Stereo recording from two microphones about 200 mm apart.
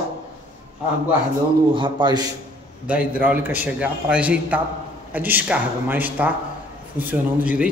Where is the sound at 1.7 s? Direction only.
20° right (ahead or behind).